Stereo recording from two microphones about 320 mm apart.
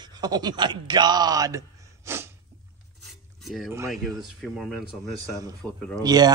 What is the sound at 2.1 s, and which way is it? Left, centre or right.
Sneeze, centre.